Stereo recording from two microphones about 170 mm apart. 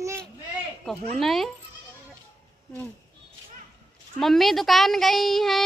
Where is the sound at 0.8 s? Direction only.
Centre (ahead or behind).